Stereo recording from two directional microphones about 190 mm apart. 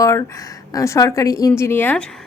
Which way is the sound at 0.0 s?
15° left (ahead or behind).